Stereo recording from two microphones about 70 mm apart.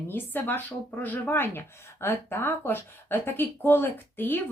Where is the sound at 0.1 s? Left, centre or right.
Left.